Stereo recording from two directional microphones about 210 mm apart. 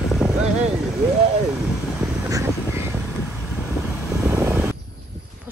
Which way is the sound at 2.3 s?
15° right (ahead or behind).